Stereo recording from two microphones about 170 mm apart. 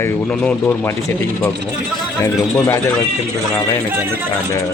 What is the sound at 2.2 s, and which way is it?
Speech, 15° left (ahead or behind).